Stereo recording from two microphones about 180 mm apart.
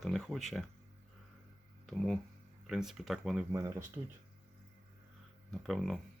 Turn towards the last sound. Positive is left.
turn(degrees=0)  # may be behind; listen again after turning